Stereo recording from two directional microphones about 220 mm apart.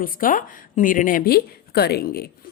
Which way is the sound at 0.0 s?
40° left (ahead or behind).